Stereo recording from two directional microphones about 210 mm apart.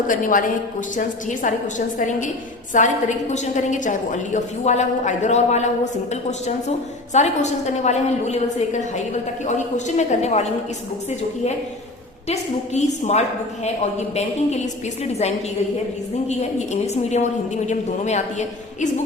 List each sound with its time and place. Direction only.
0.1 s a woman's voice: 40° left (ahead or behind)
12.3 s a woman's voice: 30° left (ahead or behind)
16.3 s a woman's voice: 30° left (ahead or behind)